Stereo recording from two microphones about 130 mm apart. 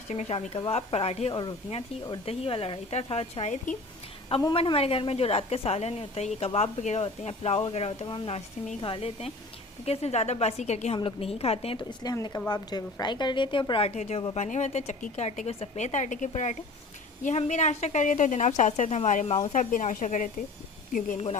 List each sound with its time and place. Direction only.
0.1 s a woman's voice: 60° left (ahead or behind)
1.3 s a woman's voice: 35° left (ahead or behind)
2.2 s a woman's voice: 50° left (ahead or behind)
4.5 s a woman's voice: 45° left (ahead or behind)
10.9 s a woman's voice: 45° left (ahead or behind); by 20.3 s 85° left